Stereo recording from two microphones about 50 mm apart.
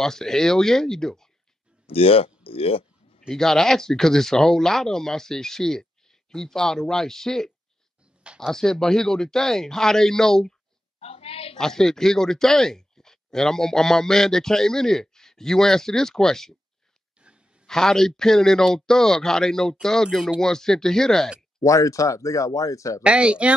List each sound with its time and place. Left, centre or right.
0.0 s speech: centre
3.3 s speech: centre
11.5 s speech: centre
17.6 s speech: centre
21.6 s speech: left
23.0 s speech: right